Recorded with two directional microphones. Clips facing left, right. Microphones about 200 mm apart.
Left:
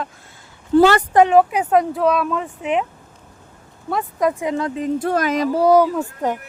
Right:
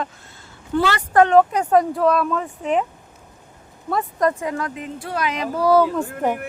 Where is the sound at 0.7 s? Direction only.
45° left (ahead or behind).